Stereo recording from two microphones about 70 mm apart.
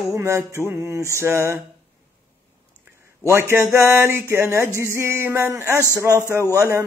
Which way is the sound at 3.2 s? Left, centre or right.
Right.